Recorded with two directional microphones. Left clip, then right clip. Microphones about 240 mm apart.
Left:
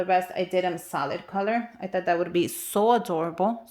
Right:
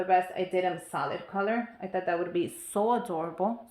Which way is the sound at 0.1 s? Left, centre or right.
Left.